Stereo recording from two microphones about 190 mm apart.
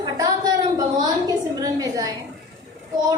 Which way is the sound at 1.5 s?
20° right (ahead or behind).